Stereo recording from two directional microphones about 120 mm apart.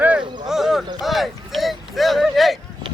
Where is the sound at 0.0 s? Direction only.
10° right (ahead or behind).